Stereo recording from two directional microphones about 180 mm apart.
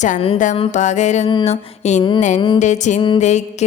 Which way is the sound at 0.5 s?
35° left (ahead or behind).